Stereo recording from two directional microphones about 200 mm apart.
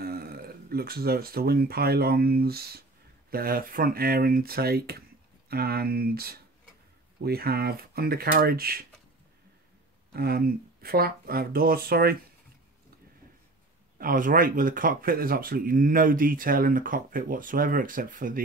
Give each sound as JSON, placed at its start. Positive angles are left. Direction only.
{"t": 0.0, "sound": "speech", "side_deg": -50}
{"t": 10.1, "sound": "speech", "side_deg": -50}
{"t": 13.9, "sound": "speech", "side_deg": -45}